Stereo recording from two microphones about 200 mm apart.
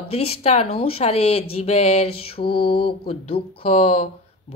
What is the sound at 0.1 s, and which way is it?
A woman's voice, 30° left (ahead or behind).